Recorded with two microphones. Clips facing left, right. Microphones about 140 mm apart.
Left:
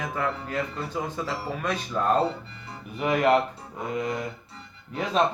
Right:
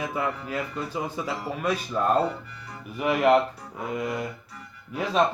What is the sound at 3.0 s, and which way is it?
Speech, 5° right (ahead or behind).